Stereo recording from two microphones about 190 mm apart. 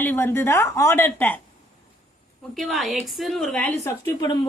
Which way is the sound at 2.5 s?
Centre (ahead or behind).